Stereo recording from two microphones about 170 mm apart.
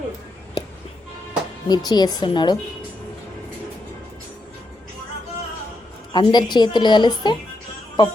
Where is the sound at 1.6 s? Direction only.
25° left (ahead or behind).